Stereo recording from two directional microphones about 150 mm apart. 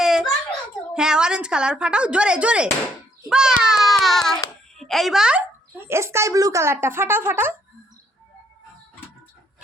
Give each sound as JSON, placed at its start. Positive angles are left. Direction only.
{"t": 0.0, "sound": "a sound", "side_deg": 0}
{"t": 0.9, "sound": "a child's voice", "side_deg": -5}
{"t": 5.9, "sound": "speech", "side_deg": -20}